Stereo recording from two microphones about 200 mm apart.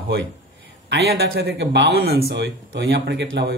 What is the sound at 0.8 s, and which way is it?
A man's voice, 55° right (ahead or behind).